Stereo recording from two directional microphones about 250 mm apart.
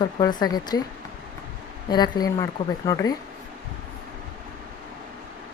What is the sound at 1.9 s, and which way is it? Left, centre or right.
Speech, centre.